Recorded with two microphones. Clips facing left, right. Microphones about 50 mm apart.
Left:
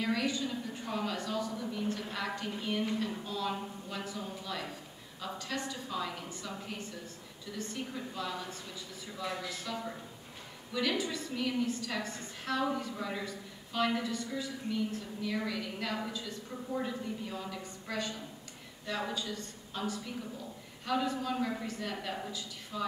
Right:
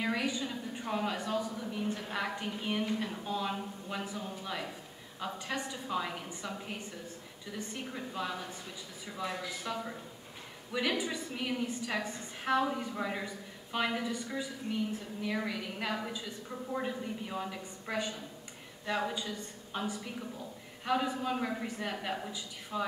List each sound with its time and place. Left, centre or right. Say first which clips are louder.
0.0 s a woman's voice: left 1 dB; centre
9.5 s a woman's voice: right 1 dB; centre